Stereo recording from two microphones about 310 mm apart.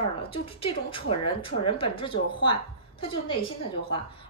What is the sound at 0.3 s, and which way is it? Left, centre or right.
A woman's voice, centre.